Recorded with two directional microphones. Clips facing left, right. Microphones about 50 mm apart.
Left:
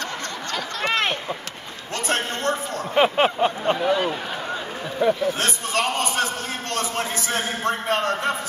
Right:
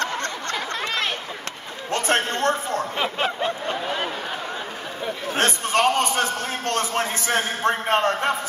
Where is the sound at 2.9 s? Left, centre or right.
Left.